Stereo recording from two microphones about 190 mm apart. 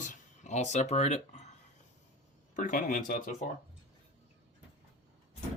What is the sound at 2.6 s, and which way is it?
Speech, 45° left (ahead or behind).